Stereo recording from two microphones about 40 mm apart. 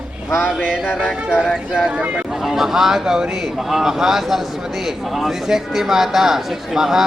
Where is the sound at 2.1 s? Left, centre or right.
Centre.